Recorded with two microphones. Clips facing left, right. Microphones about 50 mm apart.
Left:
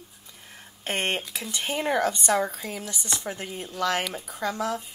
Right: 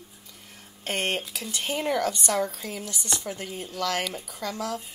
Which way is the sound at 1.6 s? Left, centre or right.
Left.